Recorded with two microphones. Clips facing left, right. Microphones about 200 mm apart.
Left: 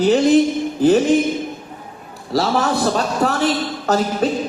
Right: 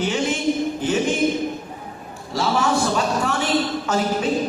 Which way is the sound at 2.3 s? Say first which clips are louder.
Left 5 dB; 35° left (ahead or behind).